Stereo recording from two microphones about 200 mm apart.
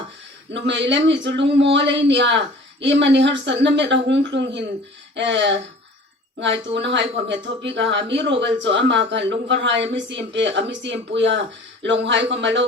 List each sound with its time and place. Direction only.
0.5 s speech: 65° right (ahead or behind)
6.9 s speech: 65° right (ahead or behind)